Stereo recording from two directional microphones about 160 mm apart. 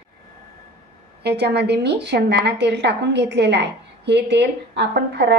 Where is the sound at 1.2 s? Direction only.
90° right.